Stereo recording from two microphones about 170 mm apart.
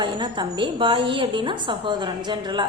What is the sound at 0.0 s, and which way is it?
A woman's voice, 25° right (ahead or behind).